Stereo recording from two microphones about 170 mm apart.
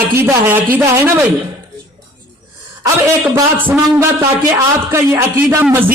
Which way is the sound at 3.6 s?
10° right (ahead or behind).